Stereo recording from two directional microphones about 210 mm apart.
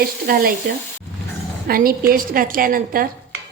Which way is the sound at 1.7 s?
45° right (ahead or behind).